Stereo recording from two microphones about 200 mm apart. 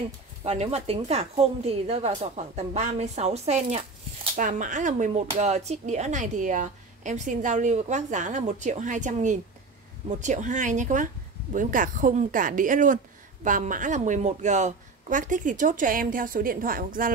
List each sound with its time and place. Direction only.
0.4 s a woman's voice: 30° right (ahead or behind)